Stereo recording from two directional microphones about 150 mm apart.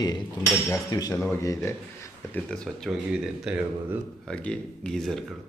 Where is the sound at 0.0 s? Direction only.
25° left (ahead or behind).